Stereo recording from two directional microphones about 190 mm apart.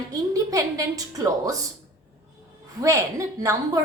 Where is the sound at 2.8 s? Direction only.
15° right (ahead or behind).